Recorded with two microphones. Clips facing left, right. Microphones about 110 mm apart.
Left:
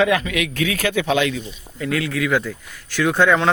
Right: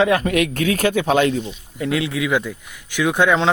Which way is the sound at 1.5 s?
20° right (ahead or behind).